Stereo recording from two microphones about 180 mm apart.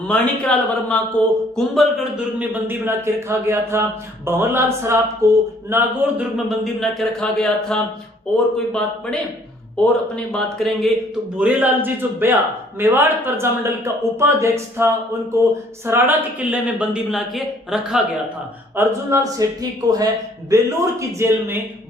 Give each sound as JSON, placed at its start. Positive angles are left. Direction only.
{"t": 0.1, "sound": "a man's voice", "side_deg": 5}
{"t": 10.3, "sound": "speech", "side_deg": 5}
{"t": 11.3, "sound": "speech", "side_deg": -10}
{"t": 18.8, "sound": "speech", "side_deg": -15}